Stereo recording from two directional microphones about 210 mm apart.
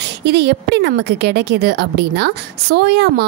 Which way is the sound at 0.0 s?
55° right (ahead or behind).